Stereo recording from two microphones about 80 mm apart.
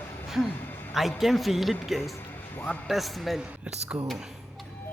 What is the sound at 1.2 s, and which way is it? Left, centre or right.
Speech, centre.